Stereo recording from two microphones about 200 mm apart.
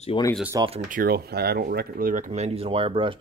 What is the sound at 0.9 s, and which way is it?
Speech, 50° right (ahead or behind).